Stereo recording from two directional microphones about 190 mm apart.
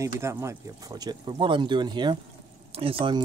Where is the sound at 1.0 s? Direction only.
25° right (ahead or behind).